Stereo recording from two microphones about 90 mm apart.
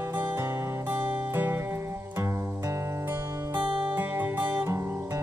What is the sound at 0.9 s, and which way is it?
Music, 25° right (ahead or behind).